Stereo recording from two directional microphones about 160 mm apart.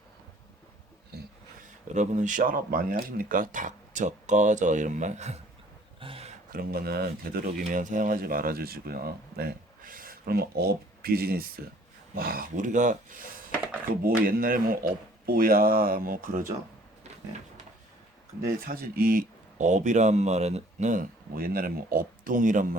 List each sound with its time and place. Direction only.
1.6 s speech: 50° right (ahead or behind)
6.0 s a sound: 35° right (ahead or behind)
6.5 s speech: 70° right (ahead or behind)
7.6 s speech: 55° right (ahead or behind)
18.6 s speech: 70° right (ahead or behind)